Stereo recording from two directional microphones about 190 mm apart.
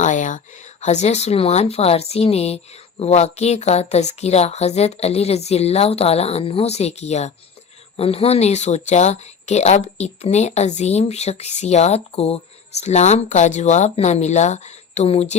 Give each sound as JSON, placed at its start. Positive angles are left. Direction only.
{"t": 0.0, "sound": "speech", "side_deg": 40}